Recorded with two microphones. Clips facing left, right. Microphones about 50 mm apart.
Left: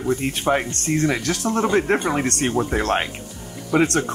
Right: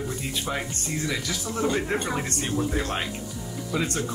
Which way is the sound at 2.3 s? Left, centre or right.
Left.